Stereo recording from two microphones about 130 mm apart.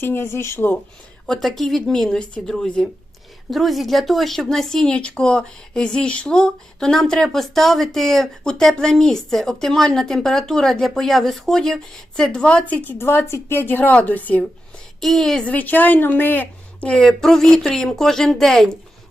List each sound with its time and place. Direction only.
0.0 s speech: 20° left (ahead or behind)
1.3 s speech: centre (ahead or behind)
15.0 s speech: centre (ahead or behind)